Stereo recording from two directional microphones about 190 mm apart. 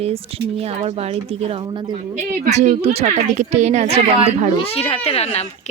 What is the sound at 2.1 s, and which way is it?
A woman's voice, 40° right (ahead or behind).